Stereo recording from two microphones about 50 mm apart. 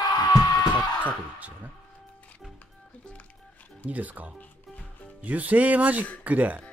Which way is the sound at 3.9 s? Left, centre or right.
Right.